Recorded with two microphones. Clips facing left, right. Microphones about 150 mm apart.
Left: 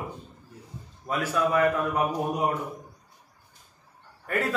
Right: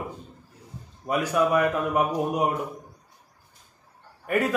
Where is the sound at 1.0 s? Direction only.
15° right (ahead or behind).